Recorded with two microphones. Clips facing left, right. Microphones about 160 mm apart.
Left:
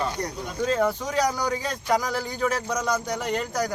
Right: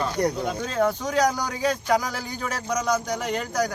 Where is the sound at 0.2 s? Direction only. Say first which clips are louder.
Right 8 dB; 65° right (ahead or behind).